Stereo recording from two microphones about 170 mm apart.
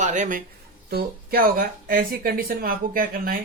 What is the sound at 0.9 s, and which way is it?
Speech, 60° right (ahead or behind).